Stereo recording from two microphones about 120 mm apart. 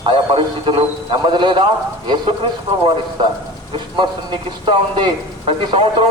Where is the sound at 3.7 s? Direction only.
40° right (ahead or behind).